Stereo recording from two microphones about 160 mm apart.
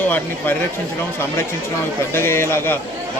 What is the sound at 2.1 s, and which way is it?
Speech, 15° left (ahead or behind).